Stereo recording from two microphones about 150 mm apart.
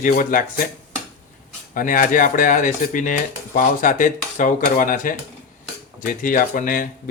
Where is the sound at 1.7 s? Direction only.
65° left (ahead or behind).